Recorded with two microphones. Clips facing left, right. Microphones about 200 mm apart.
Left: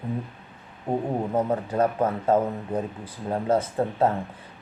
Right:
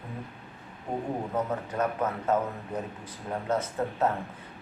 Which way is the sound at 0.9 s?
35° left (ahead or behind).